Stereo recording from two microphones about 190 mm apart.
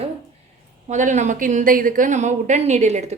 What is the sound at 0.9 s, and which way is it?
A woman's voice, 40° right (ahead or behind).